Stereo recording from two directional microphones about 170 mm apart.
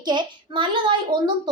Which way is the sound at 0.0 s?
25° right (ahead or behind).